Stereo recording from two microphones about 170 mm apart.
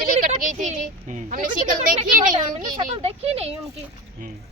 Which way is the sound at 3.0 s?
35° right (ahead or behind).